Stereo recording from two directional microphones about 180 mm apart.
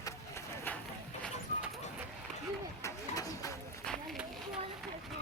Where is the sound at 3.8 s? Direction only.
Centre (ahead or behind).